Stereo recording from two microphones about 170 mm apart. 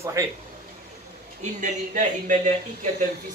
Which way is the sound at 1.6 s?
45° right (ahead or behind).